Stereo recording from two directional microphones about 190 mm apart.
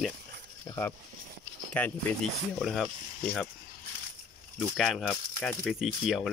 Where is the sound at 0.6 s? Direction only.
10° left (ahead or behind).